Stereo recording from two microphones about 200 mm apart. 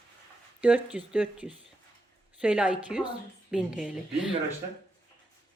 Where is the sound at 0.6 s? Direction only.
5° right (ahead or behind).